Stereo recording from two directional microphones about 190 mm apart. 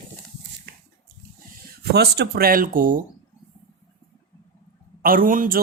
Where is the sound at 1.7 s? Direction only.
60° right (ahead or behind).